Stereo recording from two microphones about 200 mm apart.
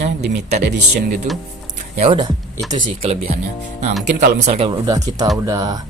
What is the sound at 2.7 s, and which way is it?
Speech, 35° right (ahead or behind).